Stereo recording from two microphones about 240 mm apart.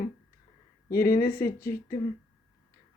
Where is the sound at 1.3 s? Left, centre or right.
Centre.